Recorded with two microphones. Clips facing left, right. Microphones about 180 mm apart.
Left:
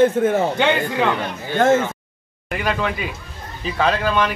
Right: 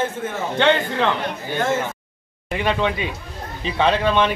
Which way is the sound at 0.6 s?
5° left (ahead or behind).